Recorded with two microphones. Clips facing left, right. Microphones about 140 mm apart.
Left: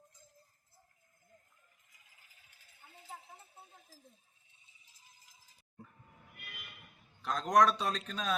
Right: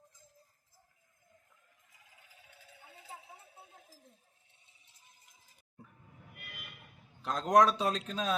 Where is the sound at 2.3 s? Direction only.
90° right.